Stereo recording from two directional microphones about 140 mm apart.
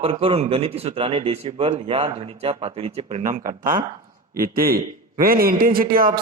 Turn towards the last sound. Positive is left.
turn(degrees=-90)